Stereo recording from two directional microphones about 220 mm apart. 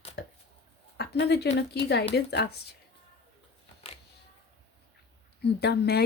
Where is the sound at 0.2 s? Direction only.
50° left (ahead or behind).